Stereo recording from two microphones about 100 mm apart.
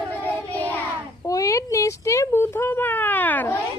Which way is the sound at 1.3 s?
35° left (ahead or behind).